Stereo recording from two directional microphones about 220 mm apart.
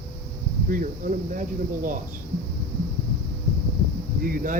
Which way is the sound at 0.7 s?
35° right (ahead or behind).